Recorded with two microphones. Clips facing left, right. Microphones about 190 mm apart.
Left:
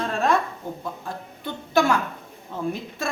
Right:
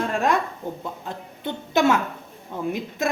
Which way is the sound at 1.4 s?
20° right (ahead or behind).